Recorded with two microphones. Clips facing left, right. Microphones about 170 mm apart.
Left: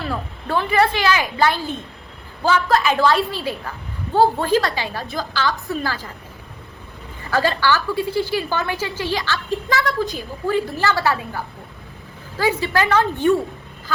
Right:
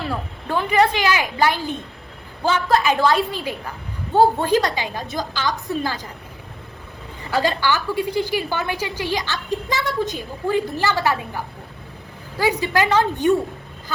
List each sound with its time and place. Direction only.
0.1 s a woman's voice: 15° right (ahead or behind)
7.3 s a woman's voice: 15° right (ahead or behind)